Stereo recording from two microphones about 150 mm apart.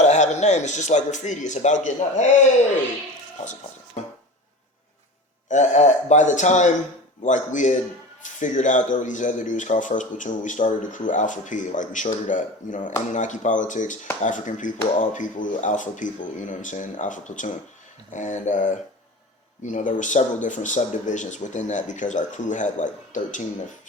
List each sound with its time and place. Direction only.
0.0 s speech: 50° left (ahead or behind)
5.5 s a man's voice: 50° left (ahead or behind)